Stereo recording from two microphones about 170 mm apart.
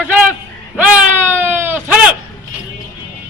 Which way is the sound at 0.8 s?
10° right (ahead or behind).